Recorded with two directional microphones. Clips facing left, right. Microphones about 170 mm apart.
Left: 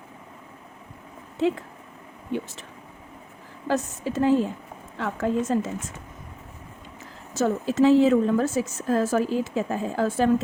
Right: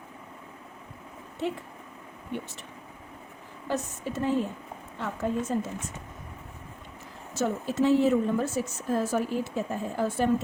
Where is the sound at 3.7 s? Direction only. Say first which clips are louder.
Left 5 dB; 90° left.